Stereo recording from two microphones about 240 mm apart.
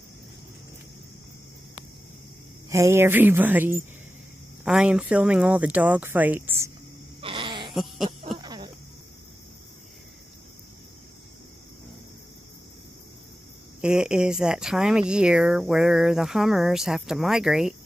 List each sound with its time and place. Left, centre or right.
2.7 s speech: centre
7.2 s a sound: right
8.4 s cricket: centre
13.7 s speech: centre